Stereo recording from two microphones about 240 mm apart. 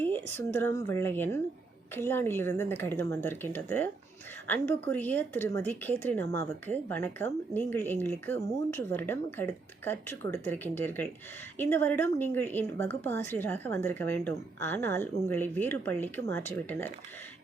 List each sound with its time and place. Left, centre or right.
0.0 s speech: centre